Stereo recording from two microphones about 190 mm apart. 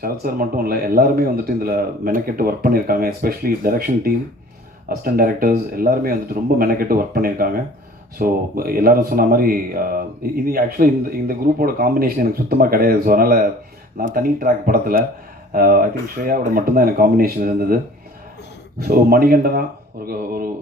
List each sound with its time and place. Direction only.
0.0 s speech: 50° right (ahead or behind)
19.1 s speech: 50° right (ahead or behind)